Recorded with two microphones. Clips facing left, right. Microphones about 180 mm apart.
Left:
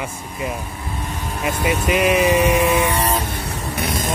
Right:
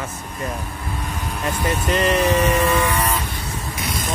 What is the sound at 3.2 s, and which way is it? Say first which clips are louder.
Vehicle: left 3 dB; 60° left (ahead or behind).